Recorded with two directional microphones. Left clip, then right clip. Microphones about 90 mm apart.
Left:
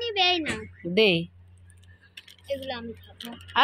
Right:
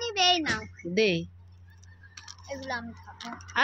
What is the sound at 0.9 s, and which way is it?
Speech, 5° left (ahead or behind).